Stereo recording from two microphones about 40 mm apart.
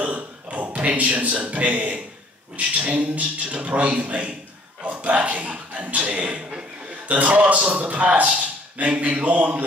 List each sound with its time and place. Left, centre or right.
0.0 s a sound: right
0.7 s a man's voice: right
4.8 s chuckle: right
6.2 s a man's voice: right
6.9 s a man's voice: right